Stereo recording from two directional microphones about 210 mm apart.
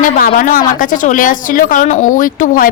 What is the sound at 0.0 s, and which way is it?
A woman's voice, 40° left (ahead or behind).